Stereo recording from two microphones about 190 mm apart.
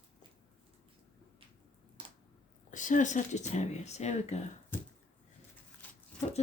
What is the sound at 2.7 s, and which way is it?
Speech, 40° left (ahead or behind).